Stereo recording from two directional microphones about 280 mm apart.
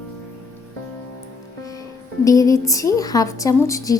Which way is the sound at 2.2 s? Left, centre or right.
Centre.